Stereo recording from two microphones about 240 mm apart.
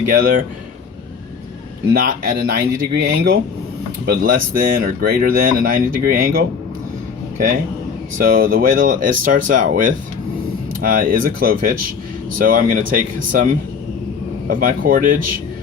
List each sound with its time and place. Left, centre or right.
0.1 s speech: right
1.9 s speech: right
8.2 s speech: right
14.5 s speech: right